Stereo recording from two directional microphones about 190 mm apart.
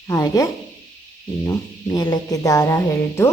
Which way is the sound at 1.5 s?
20° left (ahead or behind).